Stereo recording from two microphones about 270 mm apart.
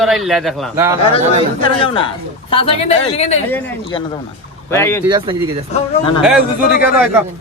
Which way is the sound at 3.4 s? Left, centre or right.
Centre.